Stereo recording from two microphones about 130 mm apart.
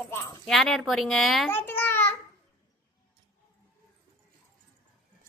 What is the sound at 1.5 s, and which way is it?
Babbling, 15° left (ahead or behind).